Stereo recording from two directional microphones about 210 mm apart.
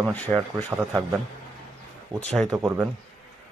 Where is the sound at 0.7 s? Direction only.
10° right (ahead or behind).